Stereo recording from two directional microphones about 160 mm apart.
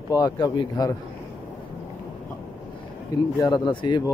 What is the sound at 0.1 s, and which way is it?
Speech, 25° left (ahead or behind).